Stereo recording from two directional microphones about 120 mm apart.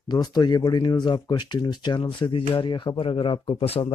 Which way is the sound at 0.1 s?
35° left (ahead or behind).